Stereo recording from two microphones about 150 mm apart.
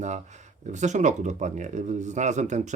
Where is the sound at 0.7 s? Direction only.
50° right (ahead or behind).